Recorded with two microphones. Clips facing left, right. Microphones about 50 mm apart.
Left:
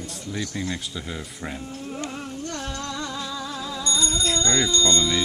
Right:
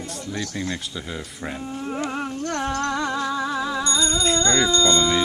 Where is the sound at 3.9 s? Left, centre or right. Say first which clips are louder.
Right 1 dB; right.